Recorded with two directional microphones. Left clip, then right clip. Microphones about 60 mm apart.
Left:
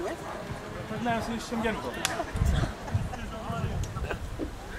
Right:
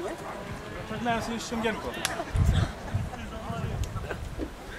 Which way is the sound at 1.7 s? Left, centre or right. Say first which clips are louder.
Even; centre.